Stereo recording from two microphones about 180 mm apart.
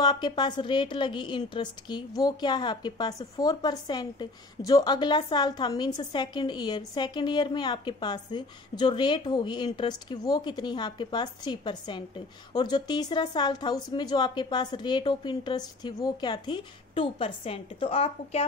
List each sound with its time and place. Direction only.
0.0 s a woman's voice: 25° left (ahead or behind)